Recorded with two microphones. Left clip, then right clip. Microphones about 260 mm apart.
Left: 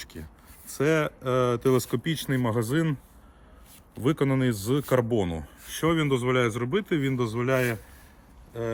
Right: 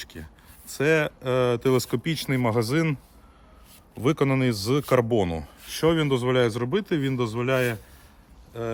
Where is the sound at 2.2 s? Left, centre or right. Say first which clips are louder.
Right 6 dB; right.